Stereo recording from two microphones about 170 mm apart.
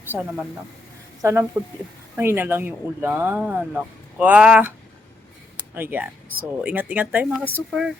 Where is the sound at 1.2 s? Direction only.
15° right (ahead or behind).